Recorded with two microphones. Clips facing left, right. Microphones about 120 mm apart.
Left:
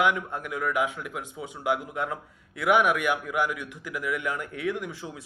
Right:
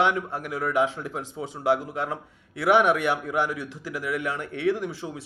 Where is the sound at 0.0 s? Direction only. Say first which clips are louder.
Right 1 dB; 30° right (ahead or behind).